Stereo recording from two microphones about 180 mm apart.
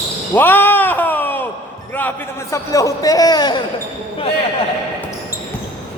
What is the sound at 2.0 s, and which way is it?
A man's voice, 15° left (ahead or behind).